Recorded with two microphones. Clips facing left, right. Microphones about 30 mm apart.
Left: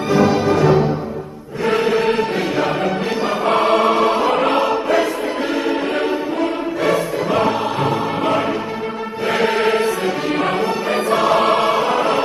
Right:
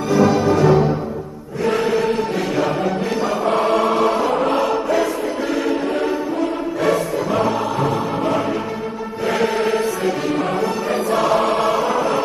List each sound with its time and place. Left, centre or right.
0.1 s music: left
3.4 s music: left
4.3 s music: left
5.5 s music: left
7.3 s choir: left
9.5 s chant: left
11.3 s choir: left